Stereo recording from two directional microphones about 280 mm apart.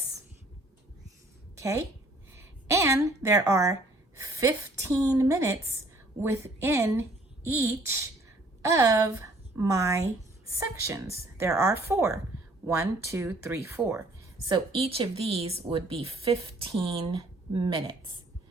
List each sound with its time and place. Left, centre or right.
1.5 s a woman's voice: centre
2.3 s a sound: centre
3.2 s a woman's voice: centre